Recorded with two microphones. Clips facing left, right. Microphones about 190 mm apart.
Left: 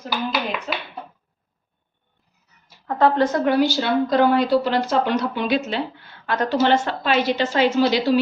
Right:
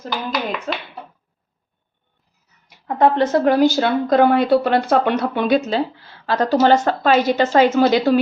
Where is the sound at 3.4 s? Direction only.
45° right (ahead or behind).